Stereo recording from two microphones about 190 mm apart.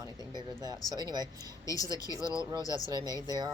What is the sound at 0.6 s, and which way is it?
Speech, 20° right (ahead or behind).